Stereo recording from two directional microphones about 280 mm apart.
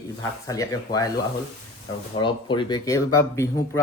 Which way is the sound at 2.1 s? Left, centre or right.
Centre.